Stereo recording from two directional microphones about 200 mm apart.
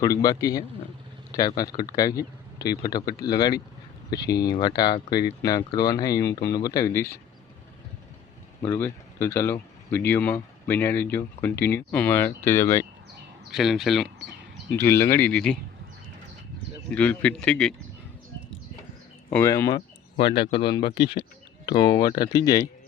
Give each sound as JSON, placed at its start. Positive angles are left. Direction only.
{"t": 0.0, "sound": "speech", "side_deg": 20}
{"t": 8.6, "sound": "speech", "side_deg": 10}
{"t": 13.5, "sound": "speech", "side_deg": 0}
{"t": 14.8, "sound": "speech", "side_deg": 15}
{"t": 16.9, "sound": "speech", "side_deg": 5}
{"t": 19.3, "sound": "speech", "side_deg": 15}